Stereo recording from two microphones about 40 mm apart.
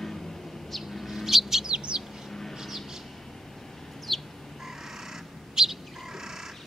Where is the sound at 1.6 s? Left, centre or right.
Right.